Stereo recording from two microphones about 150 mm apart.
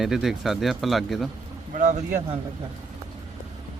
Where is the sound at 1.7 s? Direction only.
55° right (ahead or behind).